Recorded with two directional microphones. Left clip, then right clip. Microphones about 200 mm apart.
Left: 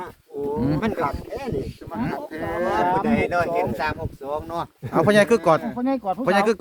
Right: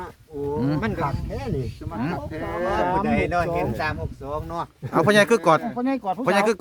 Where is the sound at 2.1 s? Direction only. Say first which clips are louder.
Left 2 dB; 45° left (ahead or behind).